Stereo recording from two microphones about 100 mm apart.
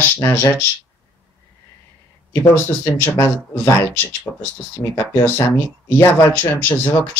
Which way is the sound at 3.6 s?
25° left (ahead or behind).